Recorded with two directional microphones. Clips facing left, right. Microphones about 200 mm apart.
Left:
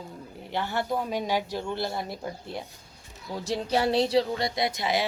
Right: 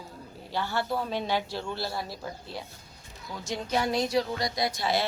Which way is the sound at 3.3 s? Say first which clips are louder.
Left 3 dB; 35° left (ahead or behind).